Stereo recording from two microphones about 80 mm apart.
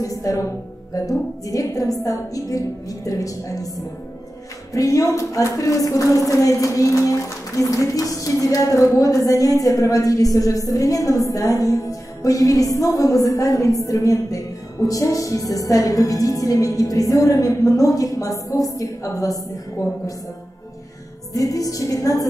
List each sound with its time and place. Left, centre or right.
0.0 s a woman's voice: left
21.3 s speech: left